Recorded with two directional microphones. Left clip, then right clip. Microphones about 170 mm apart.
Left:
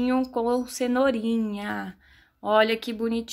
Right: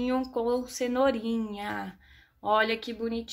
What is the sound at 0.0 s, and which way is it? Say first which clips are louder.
A woman's voice: left 4 dB; 25° left (ahead or behind).